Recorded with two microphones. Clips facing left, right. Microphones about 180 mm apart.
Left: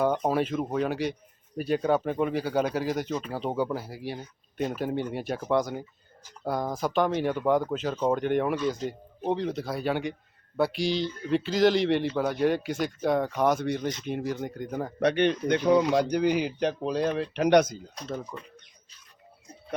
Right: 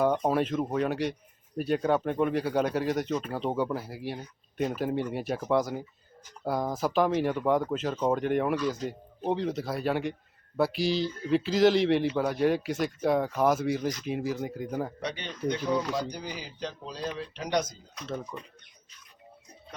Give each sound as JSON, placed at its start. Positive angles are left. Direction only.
{"t": 0.0, "sound": "speech", "side_deg": 0}
{"t": 14.9, "sound": "speech", "side_deg": 65}
{"t": 18.1, "sound": "speech", "side_deg": 10}